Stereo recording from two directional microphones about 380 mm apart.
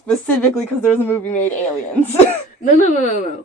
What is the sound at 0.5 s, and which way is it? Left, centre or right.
Speech, centre.